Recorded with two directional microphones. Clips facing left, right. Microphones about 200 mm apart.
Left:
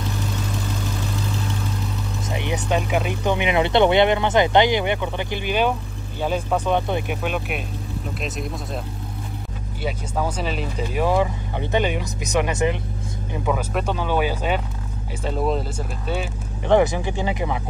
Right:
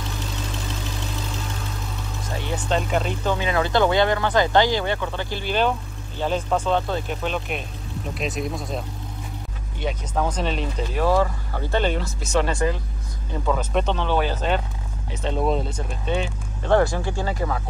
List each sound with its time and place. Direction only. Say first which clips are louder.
2.2 s vehicle: left 3 dB; 15° left (ahead or behind)
2.7 s speech: even; 10° left (ahead or behind)
16.6 s speech: left 2 dB; 15° left (ahead or behind)